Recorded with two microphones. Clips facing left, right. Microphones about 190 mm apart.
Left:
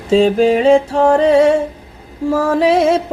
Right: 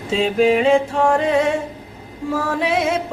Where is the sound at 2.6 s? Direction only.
35° left (ahead or behind).